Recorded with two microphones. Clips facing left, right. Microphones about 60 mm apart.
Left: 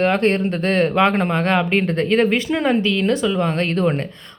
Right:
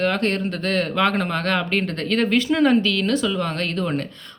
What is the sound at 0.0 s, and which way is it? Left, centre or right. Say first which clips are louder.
Speech: left 4 dB; left.